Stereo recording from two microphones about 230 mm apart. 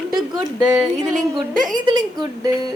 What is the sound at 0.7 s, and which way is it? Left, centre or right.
Speech, centre.